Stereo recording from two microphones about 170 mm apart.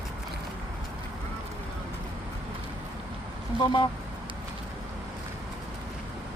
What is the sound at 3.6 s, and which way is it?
Speech, 25° left (ahead or behind).